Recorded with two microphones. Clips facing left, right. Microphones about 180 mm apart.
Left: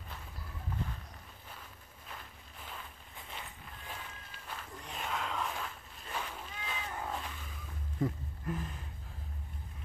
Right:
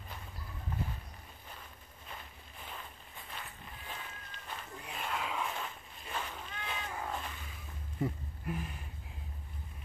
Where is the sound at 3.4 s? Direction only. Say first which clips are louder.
Even; 20° left (ahead or behind).